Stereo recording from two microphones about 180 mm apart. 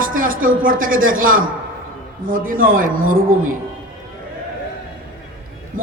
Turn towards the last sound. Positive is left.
turn(degrees=-50)  # may be behind; listen again after turning